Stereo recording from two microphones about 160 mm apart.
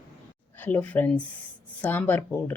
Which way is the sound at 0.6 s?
10° left (ahead or behind).